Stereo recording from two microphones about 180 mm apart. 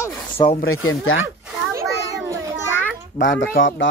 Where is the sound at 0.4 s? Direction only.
25° left (ahead or behind).